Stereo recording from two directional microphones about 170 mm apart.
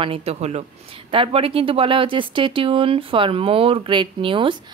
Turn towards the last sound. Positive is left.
turn(degrees=-30)  # may be behind; listen again after turning